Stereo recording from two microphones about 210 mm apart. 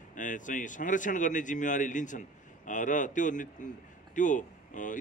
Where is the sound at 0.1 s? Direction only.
40° left (ahead or behind).